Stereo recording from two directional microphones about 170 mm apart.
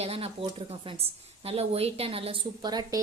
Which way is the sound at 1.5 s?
35° right (ahead or behind).